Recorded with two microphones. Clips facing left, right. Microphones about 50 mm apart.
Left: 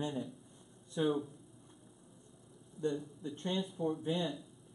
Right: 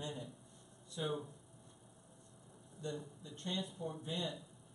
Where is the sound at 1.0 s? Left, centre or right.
Left.